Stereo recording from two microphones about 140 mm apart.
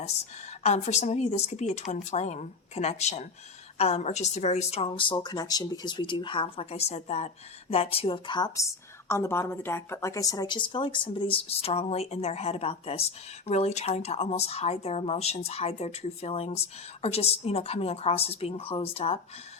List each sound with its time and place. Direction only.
0.6 s a woman's voice: 55° left (ahead or behind)